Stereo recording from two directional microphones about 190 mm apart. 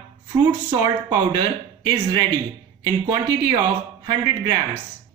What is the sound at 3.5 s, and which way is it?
A man's voice, 25° right (ahead or behind).